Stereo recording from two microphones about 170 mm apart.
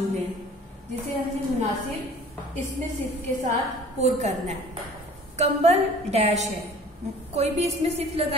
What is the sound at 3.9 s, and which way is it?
A woman's voice, 40° right (ahead or behind).